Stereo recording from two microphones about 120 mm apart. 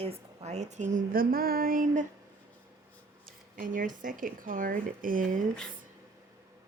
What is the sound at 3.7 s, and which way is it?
Speech, 90° right.